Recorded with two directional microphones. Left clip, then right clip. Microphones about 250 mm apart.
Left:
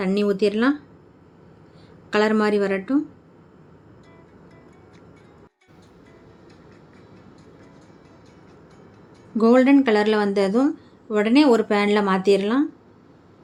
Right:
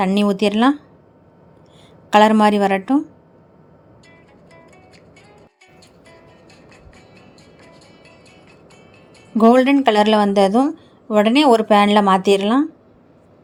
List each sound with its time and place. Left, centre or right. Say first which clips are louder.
0.0 s a woman's voice: right 3 dB; right
2.0 s a woman's voice: right 8 dB; right
9.3 s a woman's voice: right 3 dB; right